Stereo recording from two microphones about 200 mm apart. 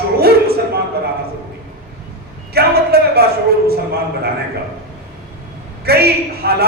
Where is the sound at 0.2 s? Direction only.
50° right (ahead or behind).